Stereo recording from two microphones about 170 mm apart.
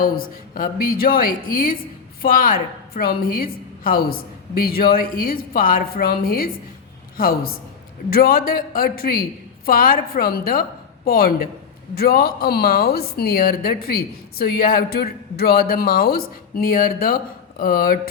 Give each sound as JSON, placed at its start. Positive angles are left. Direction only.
{"t": 0.0, "sound": "speech", "side_deg": 60}